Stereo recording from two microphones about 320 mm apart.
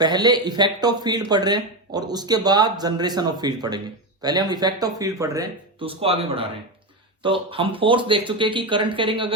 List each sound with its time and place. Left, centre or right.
0.0 s speech: centre